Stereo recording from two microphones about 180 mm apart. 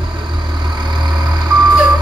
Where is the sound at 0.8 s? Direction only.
25° right (ahead or behind).